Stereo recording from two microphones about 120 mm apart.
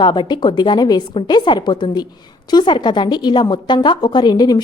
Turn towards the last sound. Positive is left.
turn(degrees=35)  # may be behind; listen again after turning